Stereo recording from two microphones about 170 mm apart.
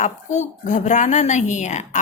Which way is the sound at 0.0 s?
45° left (ahead or behind).